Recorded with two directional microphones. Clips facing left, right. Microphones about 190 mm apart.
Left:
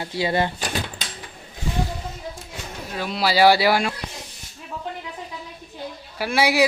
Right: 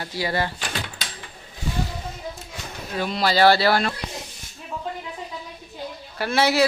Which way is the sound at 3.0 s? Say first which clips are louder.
Left 1 dB; 5° left (ahead or behind).